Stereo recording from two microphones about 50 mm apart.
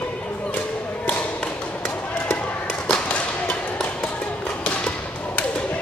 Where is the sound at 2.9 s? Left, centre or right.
Centre.